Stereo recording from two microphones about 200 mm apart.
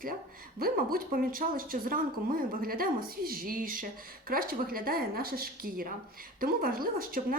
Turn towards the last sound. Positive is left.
turn(degrees=-45)  # may be behind; listen again after turning